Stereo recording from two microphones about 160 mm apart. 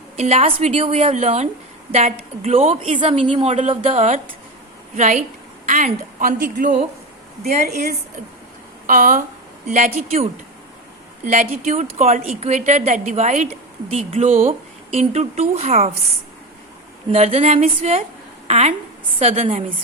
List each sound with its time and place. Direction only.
0.2 s a woman's voice: 45° right (ahead or behind)
3.9 s a woman's voice: 50° right (ahead or behind)
7.4 s a woman's voice: 75° right (ahead or behind)
8.9 s a woman's voice: 55° right (ahead or behind); by 10.2 s 40° right (ahead or behind)
11.3 s a woman's voice: 45° right (ahead or behind)
17.1 s a woman's voice: 40° right (ahead or behind)